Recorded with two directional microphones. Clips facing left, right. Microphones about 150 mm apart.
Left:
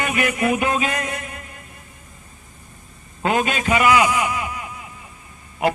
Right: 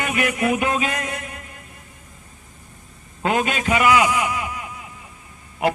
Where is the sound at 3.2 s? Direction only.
40° left (ahead or behind).